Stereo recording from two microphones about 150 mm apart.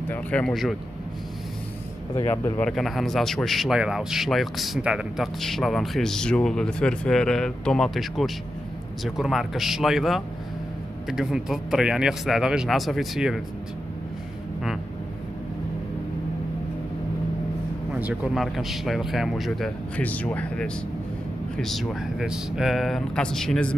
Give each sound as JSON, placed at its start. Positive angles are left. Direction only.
{"t": 0.1, "sound": "speech", "side_deg": 10}
{"t": 2.1, "sound": "speech", "side_deg": 20}
{"t": 2.6, "sound": "speech", "side_deg": 0}
{"t": 17.9, "sound": "speech", "side_deg": -10}
{"t": 20.0, "sound": "speech", "side_deg": 10}